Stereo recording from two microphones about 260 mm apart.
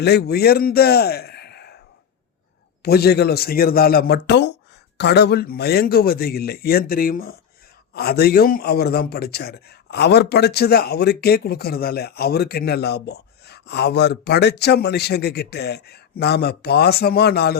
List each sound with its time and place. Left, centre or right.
0.0 s a man's voice: left
2.8 s a man's voice: left